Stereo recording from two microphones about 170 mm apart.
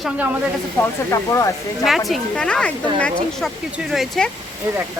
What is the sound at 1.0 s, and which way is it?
Speech, 15° left (ahead or behind).